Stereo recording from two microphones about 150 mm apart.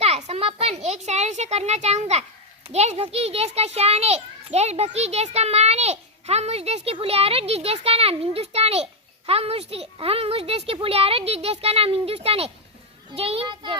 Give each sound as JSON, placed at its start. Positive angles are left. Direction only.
{"t": 0.0, "sound": "a child's voice", "side_deg": -45}